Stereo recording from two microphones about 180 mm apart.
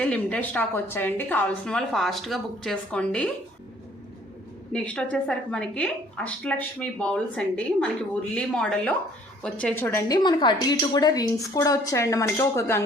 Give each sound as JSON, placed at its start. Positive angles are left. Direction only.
{"t": 0.0, "sound": "a woman's voice", "side_deg": 5}
{"t": 4.7, "sound": "a woman's voice", "side_deg": 5}
{"t": 10.2, "sound": "a woman's voice", "side_deg": 25}